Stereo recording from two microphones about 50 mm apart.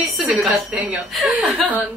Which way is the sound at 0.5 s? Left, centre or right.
Right.